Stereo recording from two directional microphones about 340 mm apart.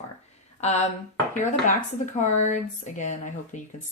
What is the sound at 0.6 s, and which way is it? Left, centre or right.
Speech, centre.